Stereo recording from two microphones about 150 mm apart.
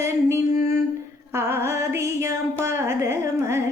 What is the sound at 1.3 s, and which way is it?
Music, 20° right (ahead or behind).